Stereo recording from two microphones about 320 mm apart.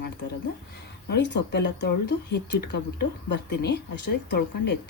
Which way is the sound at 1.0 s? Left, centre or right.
Left.